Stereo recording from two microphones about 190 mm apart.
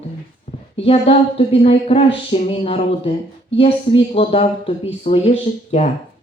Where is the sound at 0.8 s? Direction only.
30° left (ahead or behind).